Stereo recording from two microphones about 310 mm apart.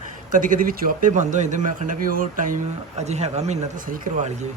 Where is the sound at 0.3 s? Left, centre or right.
Right.